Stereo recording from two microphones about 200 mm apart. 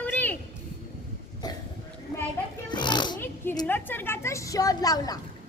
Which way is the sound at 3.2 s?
10° left (ahead or behind).